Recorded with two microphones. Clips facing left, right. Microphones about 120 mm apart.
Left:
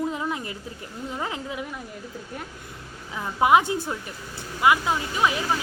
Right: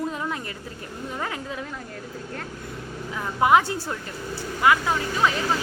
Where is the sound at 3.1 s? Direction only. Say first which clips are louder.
Even; 20° left (ahead or behind).